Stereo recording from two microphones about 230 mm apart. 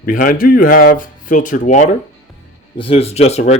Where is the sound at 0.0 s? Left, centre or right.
Left.